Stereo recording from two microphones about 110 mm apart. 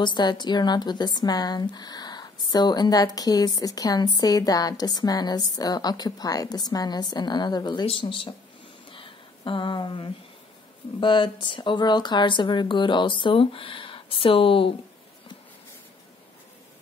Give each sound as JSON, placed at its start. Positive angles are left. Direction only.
{"t": 0.0, "sound": "speech", "side_deg": 45}
{"t": 8.9, "sound": "a sound", "side_deg": 50}
{"t": 11.0, "sound": "speech", "side_deg": 50}